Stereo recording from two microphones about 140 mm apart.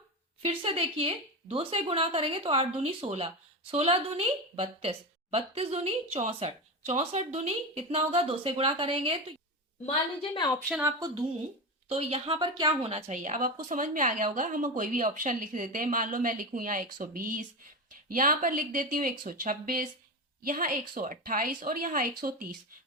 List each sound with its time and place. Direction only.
0.4 s a woman's voice: 40° right (ahead or behind)
10.2 s a woman's voice: 35° left (ahead or behind)
11.9 s speech: 45° right (ahead or behind)
12.8 s a woman's voice: 45° right (ahead or behind); by 22.1 s 90° right
22.2 s a woman's voice: 80° right